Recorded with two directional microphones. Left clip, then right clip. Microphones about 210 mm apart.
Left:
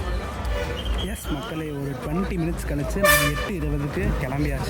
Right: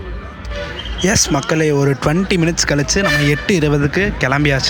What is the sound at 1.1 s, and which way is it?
Speech, 30° right (ahead or behind).